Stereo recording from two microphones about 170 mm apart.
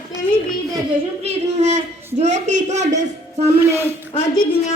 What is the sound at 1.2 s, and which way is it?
A woman's voice, 40° right (ahead or behind).